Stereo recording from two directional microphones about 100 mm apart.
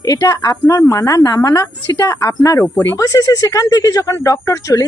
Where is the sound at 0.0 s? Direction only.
35° left (ahead or behind).